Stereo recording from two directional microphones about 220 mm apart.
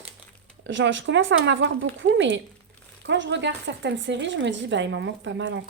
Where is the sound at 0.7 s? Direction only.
55° right (ahead or behind).